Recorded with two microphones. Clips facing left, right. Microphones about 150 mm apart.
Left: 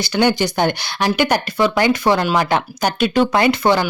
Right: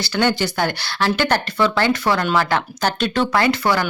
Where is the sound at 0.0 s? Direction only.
15° left (ahead or behind).